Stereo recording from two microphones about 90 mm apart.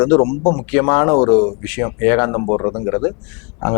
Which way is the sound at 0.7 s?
20° left (ahead or behind).